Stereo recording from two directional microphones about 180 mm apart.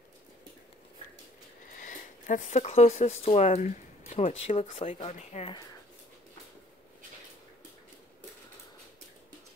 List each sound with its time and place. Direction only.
1.8 s speech: 45° left (ahead or behind)